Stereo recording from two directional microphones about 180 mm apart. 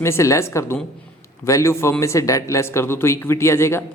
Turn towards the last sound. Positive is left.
turn(degrees=15)  # may be behind; listen again after turning